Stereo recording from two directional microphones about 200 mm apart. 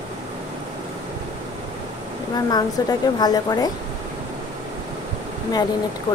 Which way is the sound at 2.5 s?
20° left (ahead or behind).